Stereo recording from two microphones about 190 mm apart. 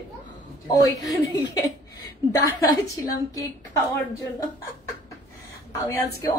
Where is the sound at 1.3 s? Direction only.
20° left (ahead or behind).